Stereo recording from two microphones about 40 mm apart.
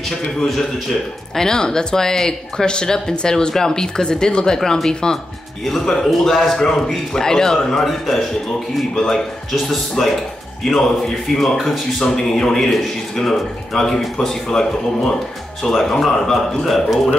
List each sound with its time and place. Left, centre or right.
0.5 s speech: centre
4.6 s speech: centre
6.0 s a man's voice: centre
7.8 s a man's voice: centre
12.0 s a man's voice: centre